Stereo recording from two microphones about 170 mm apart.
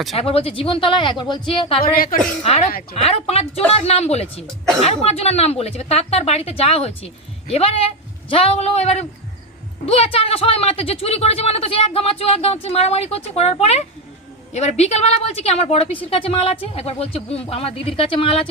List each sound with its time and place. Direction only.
0.2 s speech: 35° left (ahead or behind)
1.8 s a woman's voice: 55° left (ahead or behind)
2.4 s speech: 35° left (ahead or behind)